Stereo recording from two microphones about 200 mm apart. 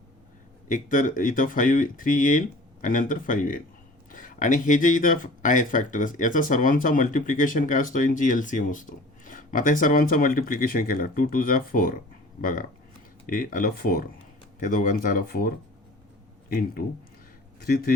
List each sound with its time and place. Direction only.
0.7 s speech: 40° left (ahead or behind)